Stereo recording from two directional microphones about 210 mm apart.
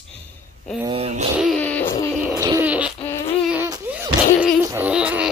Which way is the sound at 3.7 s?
10° right (ahead or behind).